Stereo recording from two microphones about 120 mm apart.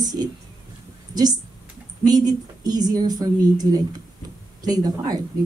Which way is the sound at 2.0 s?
35° right (ahead or behind).